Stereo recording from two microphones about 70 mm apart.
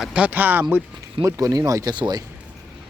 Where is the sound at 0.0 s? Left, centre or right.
Centre.